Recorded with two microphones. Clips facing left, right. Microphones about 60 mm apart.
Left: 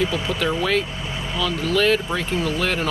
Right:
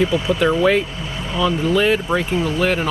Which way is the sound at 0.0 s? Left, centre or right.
Centre.